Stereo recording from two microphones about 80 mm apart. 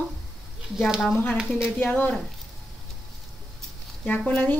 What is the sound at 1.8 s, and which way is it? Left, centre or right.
Speech, left.